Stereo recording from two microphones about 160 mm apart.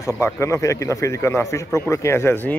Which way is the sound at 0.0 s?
15° left (ahead or behind).